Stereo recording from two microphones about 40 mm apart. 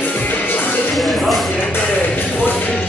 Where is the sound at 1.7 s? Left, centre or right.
Left.